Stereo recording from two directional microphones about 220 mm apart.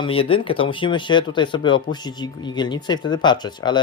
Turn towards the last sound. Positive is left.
turn(degrees=20)  # may be behind; listen again after turning